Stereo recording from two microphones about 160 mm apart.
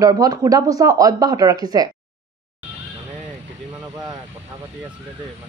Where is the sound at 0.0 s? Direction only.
25° right (ahead or behind).